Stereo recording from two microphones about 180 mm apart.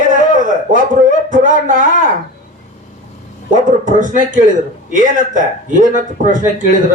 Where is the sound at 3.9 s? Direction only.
45° right (ahead or behind).